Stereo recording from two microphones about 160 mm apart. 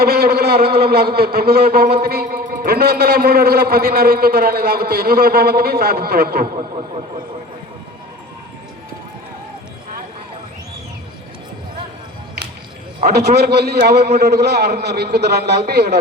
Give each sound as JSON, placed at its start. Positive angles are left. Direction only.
{"t": 0.0, "sound": "a man's voice", "side_deg": -80}
{"t": 6.4, "sound": "a man's voice", "side_deg": -35}
{"t": 13.1, "sound": "speech", "side_deg": -90}